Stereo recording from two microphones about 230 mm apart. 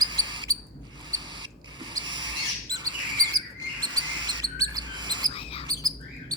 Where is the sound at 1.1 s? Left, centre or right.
Centre.